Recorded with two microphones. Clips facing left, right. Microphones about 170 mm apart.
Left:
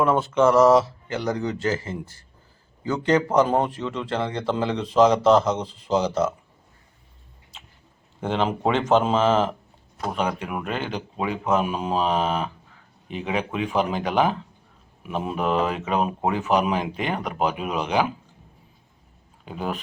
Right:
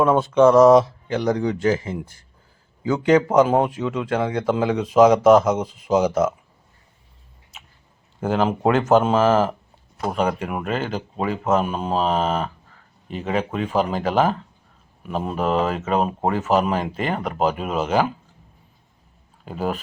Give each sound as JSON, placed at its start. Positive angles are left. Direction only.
{"t": 0.0, "sound": "a man's voice", "side_deg": -15}
{"t": 8.2, "sound": "speech", "side_deg": -5}
{"t": 19.5, "sound": "speech", "side_deg": 0}